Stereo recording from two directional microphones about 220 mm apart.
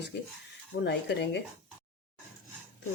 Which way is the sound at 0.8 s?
50° left (ahead or behind).